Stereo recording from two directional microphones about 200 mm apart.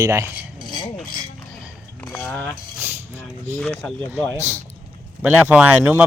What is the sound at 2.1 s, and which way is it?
Cutlery, 10° left (ahead or behind).